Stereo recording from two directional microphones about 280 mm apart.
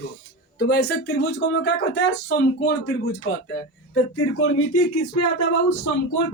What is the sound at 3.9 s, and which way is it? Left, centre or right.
Speech, left.